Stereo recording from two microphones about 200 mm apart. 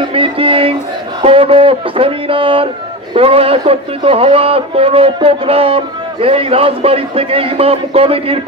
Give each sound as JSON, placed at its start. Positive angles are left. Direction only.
{"t": 0.1, "sound": "a man's voice", "side_deg": -25}